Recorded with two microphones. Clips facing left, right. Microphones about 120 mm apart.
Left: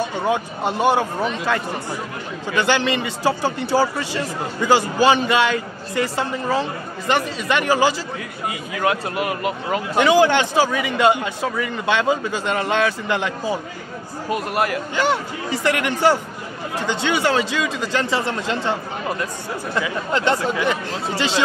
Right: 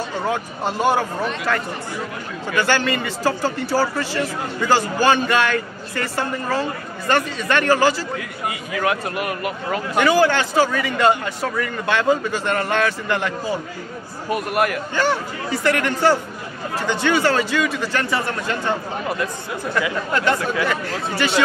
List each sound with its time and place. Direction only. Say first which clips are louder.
0.3 s speech: left 2 dB; 20° left (ahead or behind)